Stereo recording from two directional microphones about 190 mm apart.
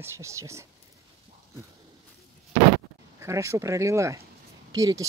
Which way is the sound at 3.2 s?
15° right (ahead or behind).